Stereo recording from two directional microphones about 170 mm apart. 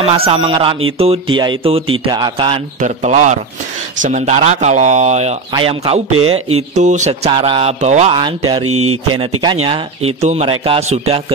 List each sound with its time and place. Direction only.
0.1 s speech: 35° right (ahead or behind)
2.8 s speech: 45° right (ahead or behind)
5.5 s speech: 30° right (ahead or behind)
7.2 s speech: 30° right (ahead or behind)
8.1 s speech: 30° right (ahead or behind)